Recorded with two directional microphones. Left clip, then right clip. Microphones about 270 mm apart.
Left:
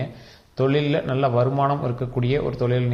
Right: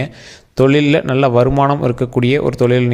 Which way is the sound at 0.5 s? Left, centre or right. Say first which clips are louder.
Right 9 dB; right.